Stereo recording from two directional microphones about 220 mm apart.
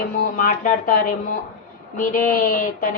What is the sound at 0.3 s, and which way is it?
A woman's voice, 35° left (ahead or behind).